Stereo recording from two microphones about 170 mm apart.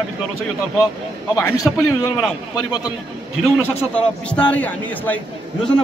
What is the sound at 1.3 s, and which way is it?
A man's voice, 20° left (ahead or behind).